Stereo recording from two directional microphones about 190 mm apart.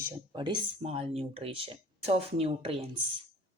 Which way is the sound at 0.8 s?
35° right (ahead or behind).